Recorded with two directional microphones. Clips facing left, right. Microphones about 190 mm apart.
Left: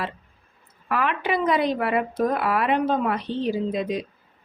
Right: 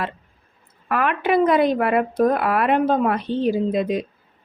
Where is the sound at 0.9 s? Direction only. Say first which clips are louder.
Right 4 dB; 55° right (ahead or behind).